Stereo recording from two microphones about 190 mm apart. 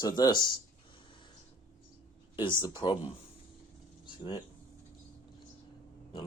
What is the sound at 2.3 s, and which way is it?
Speech, 25° left (ahead or behind).